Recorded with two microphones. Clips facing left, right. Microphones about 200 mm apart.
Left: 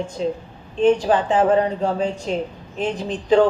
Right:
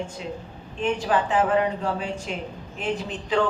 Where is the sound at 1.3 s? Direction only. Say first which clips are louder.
Left 5 dB; 35° left (ahead or behind).